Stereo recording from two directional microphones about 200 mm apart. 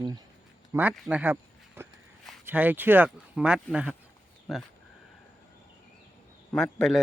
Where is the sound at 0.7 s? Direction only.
10° right (ahead or behind).